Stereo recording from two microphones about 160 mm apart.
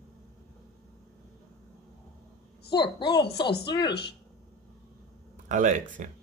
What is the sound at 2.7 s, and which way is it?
Speech, 30° left (ahead or behind).